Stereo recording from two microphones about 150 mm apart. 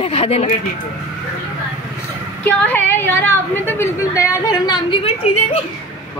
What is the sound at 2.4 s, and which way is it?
A woman's voice, 10° left (ahead or behind).